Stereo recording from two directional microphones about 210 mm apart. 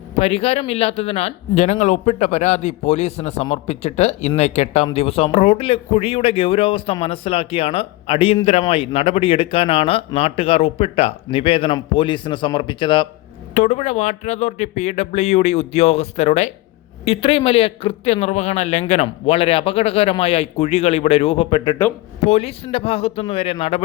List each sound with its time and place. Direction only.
0.2 s speech: 30° left (ahead or behind)
13.5 s speech: 35° left (ahead or behind)